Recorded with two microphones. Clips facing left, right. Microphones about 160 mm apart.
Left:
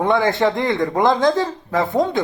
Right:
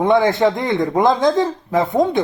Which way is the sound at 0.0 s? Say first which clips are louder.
Right 3 dB; 20° right (ahead or behind).